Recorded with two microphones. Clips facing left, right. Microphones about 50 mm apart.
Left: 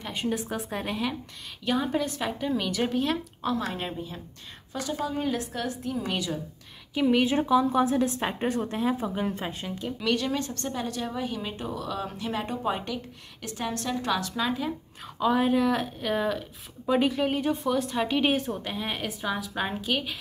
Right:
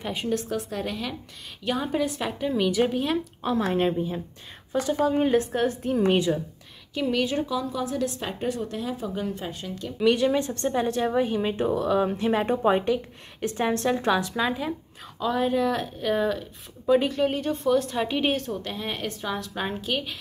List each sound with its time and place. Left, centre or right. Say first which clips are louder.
0.0 s speech: right 1 dB; centre
0.3 s speech: right 3 dB; centre
1.6 s speech: right 1 dB; centre
3.5 s a woman's voice: right 7 dB; right
6.9 s a woman's voice: left 2 dB; centre
9.9 s speech: right 7 dB; centre
14.2 s speech: right 2 dB; centre
15.1 s speech: left 1 dB; centre
18.3 s speech: even; centre